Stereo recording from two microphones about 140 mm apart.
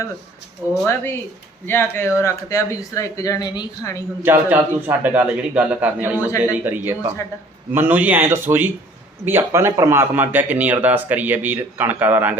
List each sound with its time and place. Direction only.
0.6 s speech: 15° right (ahead or behind)
1.6 s speech: 15° left (ahead or behind)
4.2 s speech: 15° right (ahead or behind)
6.7 s a man's voice: 25° right (ahead or behind)